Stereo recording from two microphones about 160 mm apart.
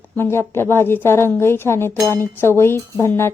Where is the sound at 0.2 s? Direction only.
15° left (ahead or behind).